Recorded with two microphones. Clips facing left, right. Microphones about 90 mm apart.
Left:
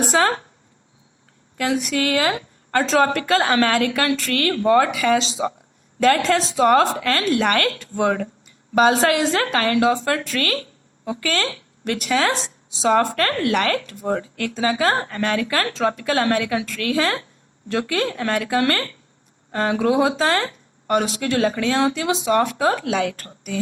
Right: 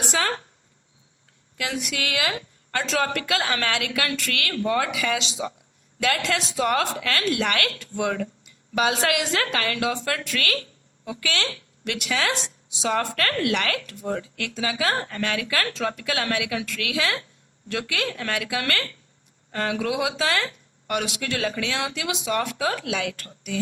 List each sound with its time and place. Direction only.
0.0 s a woman's voice: 40° left (ahead or behind)
1.5 s a woman's voice: 40° left (ahead or behind)